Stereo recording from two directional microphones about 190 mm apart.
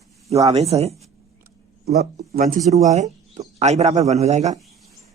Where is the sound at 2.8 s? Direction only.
35° right (ahead or behind).